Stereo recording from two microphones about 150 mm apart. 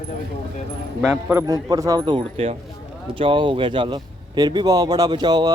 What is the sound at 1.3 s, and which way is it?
Speech, 20° right (ahead or behind).